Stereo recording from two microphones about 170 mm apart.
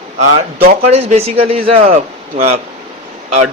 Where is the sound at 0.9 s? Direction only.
40° right (ahead or behind).